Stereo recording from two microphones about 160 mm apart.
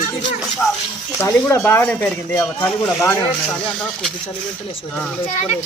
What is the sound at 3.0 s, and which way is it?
Speech, 15° left (ahead or behind).